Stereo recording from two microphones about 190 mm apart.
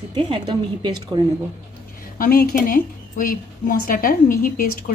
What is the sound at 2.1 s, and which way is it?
A woman's voice, 50° left (ahead or behind).